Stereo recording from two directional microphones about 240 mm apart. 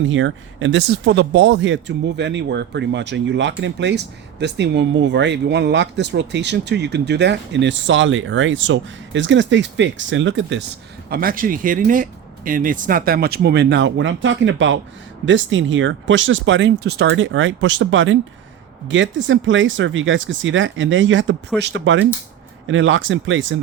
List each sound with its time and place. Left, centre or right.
0.1 s speech: right
11.1 s speech: right